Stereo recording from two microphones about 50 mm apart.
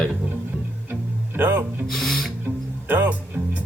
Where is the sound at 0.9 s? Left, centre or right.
Right.